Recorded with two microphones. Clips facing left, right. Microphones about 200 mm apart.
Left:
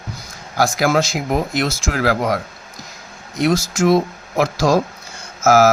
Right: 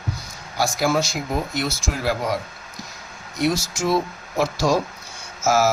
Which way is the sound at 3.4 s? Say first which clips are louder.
Left 5 dB; 90° left.